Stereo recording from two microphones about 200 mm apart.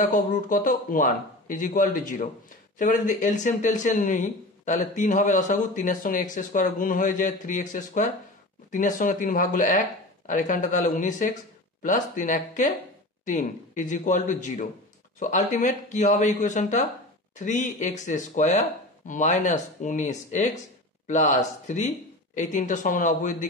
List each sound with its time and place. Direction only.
0.0 s speech: 40° left (ahead or behind)